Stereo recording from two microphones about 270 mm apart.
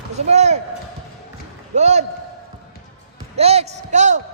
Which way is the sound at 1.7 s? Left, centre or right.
Right.